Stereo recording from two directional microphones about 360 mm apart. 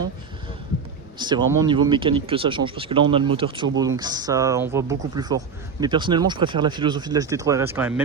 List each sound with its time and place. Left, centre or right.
1.2 s speech: centre